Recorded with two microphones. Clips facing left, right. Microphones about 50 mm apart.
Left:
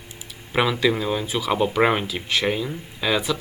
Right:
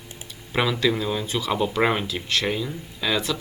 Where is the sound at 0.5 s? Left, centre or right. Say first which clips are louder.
Left 2 dB; centre.